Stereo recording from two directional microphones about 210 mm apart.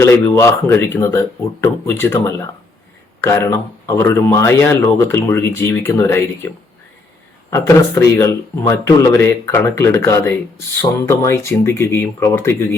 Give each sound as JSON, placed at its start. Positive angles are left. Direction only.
{"t": 0.0, "sound": "speech", "side_deg": 15}
{"t": 7.5, "sound": "speech", "side_deg": 15}